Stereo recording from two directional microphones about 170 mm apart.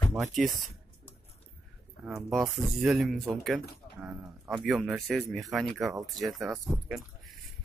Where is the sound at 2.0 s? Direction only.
Centre (ahead or behind).